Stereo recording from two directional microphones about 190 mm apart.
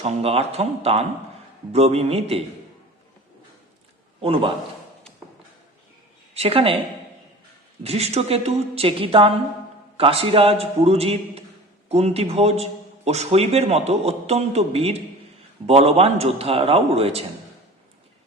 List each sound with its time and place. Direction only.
0.0 s a man's voice: 30° right (ahead or behind)
4.2 s a man's voice: 30° right (ahead or behind)
6.3 s speech: 30° right (ahead or behind)
7.9 s a man's voice: 35° right (ahead or behind)